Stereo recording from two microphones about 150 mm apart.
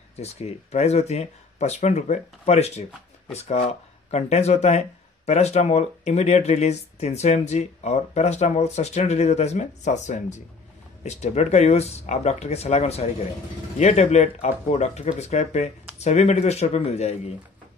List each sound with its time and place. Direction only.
0.1 s speech: 45° left (ahead or behind)